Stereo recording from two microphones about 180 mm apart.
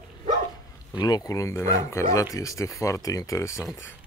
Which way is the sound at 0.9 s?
20° left (ahead or behind).